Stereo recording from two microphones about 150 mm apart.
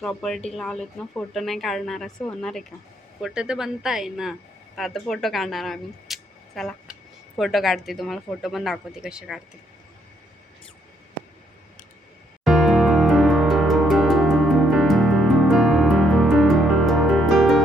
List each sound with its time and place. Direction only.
0.0 s speech: 5° left (ahead or behind)
12.5 s music: centre (ahead or behind)